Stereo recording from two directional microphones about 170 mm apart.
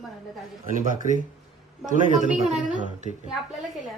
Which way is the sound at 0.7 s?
50° right (ahead or behind).